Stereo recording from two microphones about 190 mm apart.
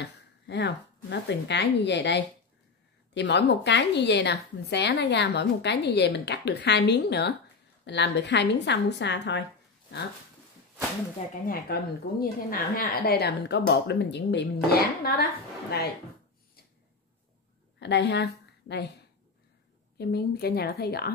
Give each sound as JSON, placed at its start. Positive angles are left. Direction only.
{"t": 0.0, "sound": "a woman's voice", "side_deg": 65}
{"t": 11.4, "sound": "a woman's voice", "side_deg": 50}
{"t": 17.7, "sound": "a woman's voice", "side_deg": 65}
{"t": 20.0, "sound": "a woman's voice", "side_deg": 55}